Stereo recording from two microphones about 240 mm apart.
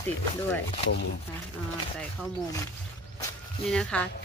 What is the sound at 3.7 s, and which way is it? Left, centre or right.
Speech, centre.